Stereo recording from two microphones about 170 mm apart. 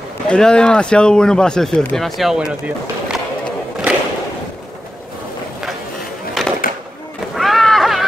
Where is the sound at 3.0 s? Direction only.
Centre (ahead or behind).